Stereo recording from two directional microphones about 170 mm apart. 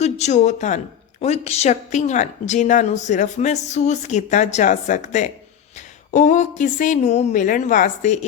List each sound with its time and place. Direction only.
0.0 s a woman's voice: 40° left (ahead or behind)